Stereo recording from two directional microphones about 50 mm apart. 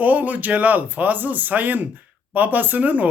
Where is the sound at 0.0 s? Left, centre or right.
Right.